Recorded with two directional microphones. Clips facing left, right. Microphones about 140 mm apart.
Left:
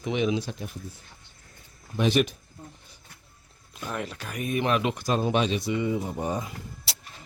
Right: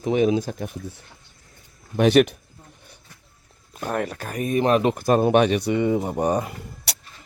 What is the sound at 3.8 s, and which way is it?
Speech, 55° right (ahead or behind).